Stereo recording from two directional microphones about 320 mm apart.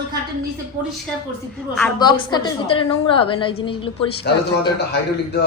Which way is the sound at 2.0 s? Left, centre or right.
Centre.